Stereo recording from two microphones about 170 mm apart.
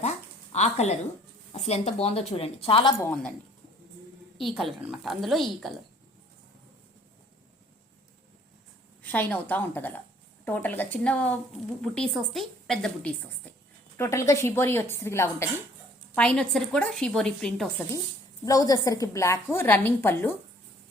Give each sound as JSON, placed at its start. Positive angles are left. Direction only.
{"t": 0.5, "sound": "a woman's voice", "side_deg": 40}
{"t": 3.0, "sound": "a woman's voice", "side_deg": 10}
{"t": 4.4, "sound": "a woman's voice", "side_deg": 0}
{"t": 9.0, "sound": "a woman's voice", "side_deg": 10}
{"t": 18.4, "sound": "a woman's voice", "side_deg": 20}